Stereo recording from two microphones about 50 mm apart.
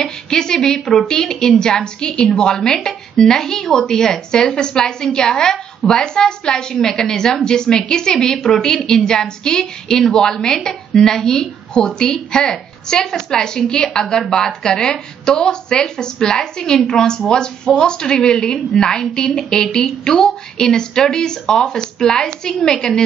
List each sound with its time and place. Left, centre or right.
0.0 s a woman's voice: centre